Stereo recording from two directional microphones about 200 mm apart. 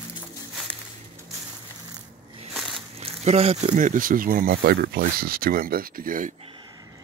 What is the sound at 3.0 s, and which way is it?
Speech, 30° right (ahead or behind).